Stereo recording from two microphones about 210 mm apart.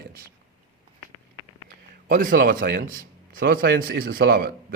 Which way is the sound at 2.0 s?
40° right (ahead or behind).